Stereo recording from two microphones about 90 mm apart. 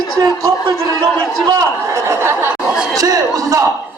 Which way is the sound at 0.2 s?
50° right (ahead or behind).